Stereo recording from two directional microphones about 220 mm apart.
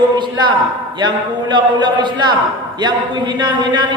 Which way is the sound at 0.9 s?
20° right (ahead or behind).